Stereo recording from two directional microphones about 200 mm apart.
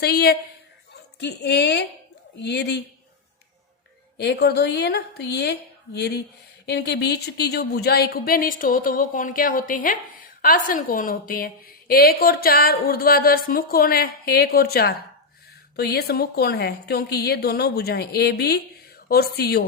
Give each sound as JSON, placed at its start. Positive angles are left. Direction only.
{"t": 0.0, "sound": "a woman's voice", "side_deg": 50}
{"t": 4.2, "sound": "a woman's voice", "side_deg": 55}